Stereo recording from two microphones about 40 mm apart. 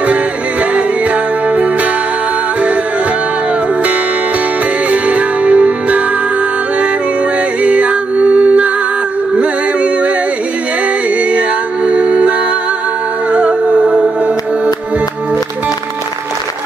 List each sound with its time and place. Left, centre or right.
0.0 s music: right
4.9 s music: right
7.6 s music: right
11.3 s mantra: right